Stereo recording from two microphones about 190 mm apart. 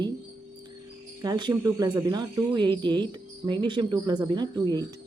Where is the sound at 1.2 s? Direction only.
20° right (ahead or behind).